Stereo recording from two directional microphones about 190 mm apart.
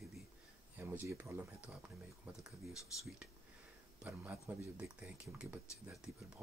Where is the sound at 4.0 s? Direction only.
10° right (ahead or behind).